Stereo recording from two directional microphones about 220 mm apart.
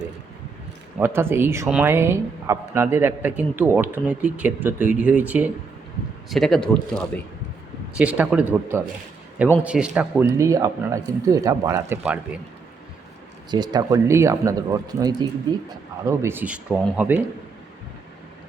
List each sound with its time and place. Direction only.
0.9 s speech: 10° right (ahead or behind)
13.5 s speech: 20° right (ahead or behind)